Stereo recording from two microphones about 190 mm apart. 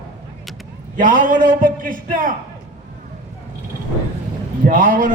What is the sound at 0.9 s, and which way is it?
Speech, 45° right (ahead or behind).